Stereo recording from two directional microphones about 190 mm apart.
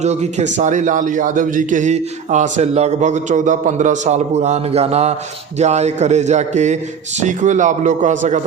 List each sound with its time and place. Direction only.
0.0 s a man's voice: 35° right (ahead or behind)